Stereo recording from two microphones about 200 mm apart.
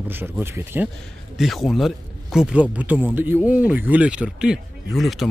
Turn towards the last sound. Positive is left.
turn(degrees=0)  # may be behind; listen again after turning